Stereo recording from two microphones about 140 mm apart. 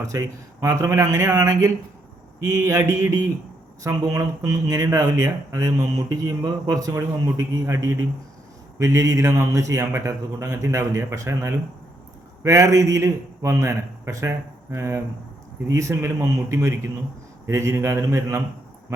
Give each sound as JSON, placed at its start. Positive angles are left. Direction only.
{"t": 0.0, "sound": "speech", "side_deg": -20}